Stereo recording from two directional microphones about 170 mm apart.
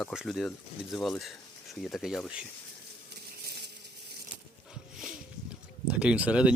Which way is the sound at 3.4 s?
70° right (ahead or behind).